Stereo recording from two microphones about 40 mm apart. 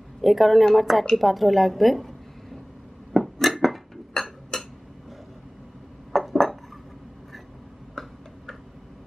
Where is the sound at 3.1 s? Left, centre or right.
Centre.